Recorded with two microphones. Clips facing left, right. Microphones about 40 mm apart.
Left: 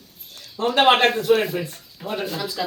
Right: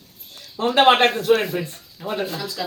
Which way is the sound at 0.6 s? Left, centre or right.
Right.